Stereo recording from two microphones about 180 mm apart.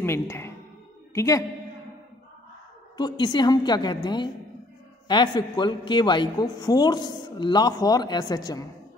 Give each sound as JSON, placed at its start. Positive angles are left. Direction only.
{"t": 0.0, "sound": "a woman's voice", "side_deg": 15}
{"t": 3.0, "sound": "a woman's voice", "side_deg": 25}